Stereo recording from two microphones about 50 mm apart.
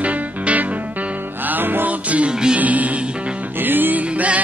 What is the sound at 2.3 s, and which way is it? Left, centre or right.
Music, centre.